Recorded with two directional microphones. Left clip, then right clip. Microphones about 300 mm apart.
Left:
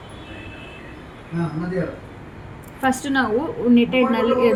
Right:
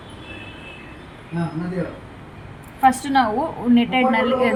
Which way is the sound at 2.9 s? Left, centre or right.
Centre.